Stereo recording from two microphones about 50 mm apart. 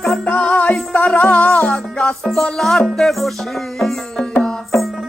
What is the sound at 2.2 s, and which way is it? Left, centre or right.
Music, centre.